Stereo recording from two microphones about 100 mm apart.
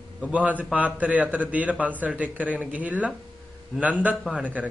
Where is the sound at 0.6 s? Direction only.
15° right (ahead or behind).